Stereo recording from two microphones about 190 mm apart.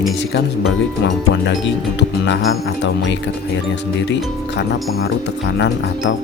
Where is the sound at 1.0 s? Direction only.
70° left (ahead or behind).